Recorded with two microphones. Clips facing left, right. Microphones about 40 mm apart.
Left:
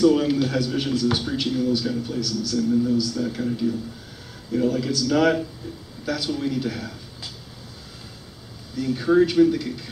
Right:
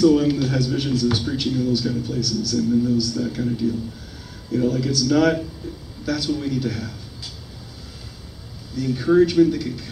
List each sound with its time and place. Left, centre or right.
0.0 s a man's voice: centre
8.7 s a man's voice: centre